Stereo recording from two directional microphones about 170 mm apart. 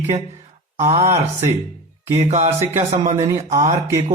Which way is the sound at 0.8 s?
20° right (ahead or behind).